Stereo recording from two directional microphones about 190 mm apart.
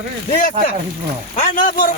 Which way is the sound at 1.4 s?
45° left (ahead or behind).